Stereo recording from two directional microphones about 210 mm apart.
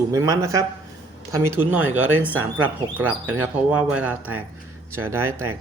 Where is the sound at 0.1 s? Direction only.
15° right (ahead or behind).